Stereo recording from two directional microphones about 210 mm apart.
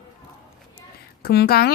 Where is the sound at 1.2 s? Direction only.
45° left (ahead or behind).